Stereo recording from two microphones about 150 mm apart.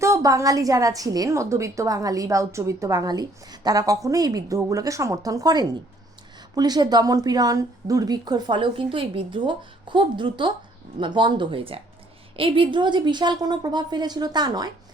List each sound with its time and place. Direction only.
0.0 s a woman's voice: 20° right (ahead or behind)